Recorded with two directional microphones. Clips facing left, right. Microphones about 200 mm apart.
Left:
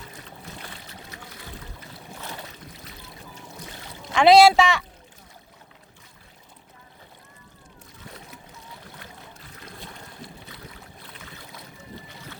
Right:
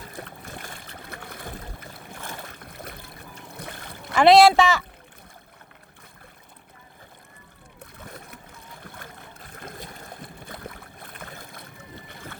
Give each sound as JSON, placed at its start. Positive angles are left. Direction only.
{"t": 0.1, "sound": "boat", "side_deg": -55}
{"t": 4.0, "sound": "speech", "side_deg": -5}
{"t": 7.8, "sound": "splash", "side_deg": -55}
{"t": 9.4, "sound": "boat", "side_deg": -50}